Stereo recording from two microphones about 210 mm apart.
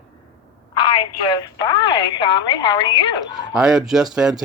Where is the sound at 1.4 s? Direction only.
20° left (ahead or behind).